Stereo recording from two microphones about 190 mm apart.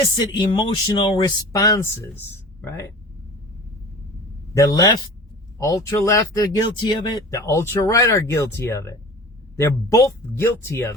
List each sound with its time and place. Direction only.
0.3 s speech: 25° left (ahead or behind)
4.5 s speech: 20° left (ahead or behind)